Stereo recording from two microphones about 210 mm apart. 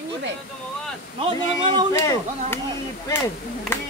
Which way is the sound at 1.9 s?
15° left (ahead or behind).